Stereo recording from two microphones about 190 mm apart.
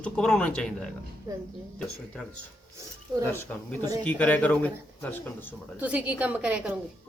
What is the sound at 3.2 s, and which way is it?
Speech, 10° left (ahead or behind).